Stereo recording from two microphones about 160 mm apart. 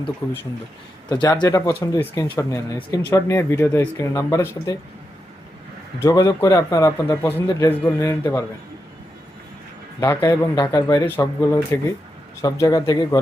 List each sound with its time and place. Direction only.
0.2 s a man's voice: 15° left (ahead or behind)
6.0 s a man's voice: 20° left (ahead or behind)
10.0 s a man's voice: 15° left (ahead or behind)